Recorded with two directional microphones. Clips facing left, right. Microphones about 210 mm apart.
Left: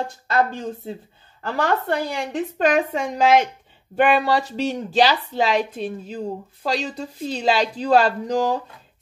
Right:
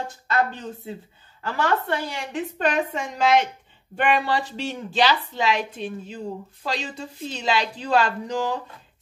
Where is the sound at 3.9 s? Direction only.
40° left (ahead or behind).